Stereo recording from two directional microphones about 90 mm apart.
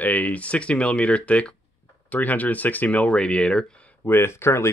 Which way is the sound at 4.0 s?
25° left (ahead or behind).